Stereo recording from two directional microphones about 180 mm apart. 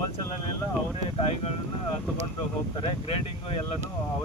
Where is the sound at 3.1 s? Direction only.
30° left (ahead or behind).